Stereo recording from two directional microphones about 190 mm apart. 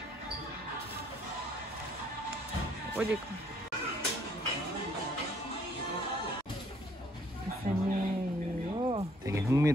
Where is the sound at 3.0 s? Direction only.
5° right (ahead or behind).